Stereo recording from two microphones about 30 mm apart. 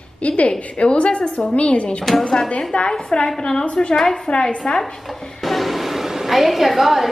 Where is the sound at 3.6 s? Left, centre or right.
Left.